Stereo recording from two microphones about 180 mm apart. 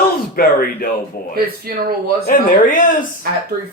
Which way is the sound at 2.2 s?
45° left (ahead or behind).